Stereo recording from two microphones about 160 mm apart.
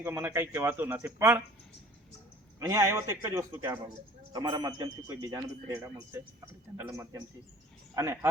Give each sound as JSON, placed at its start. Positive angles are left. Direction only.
{"t": 0.0, "sound": "a man's voice", "side_deg": -15}
{"t": 2.6, "sound": "a man's voice", "side_deg": -20}